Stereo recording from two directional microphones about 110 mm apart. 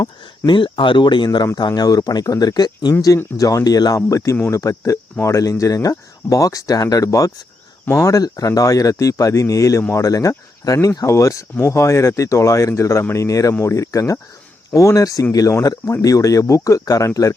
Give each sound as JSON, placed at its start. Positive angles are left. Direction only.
{"t": 0.0, "sound": "speech", "side_deg": 45}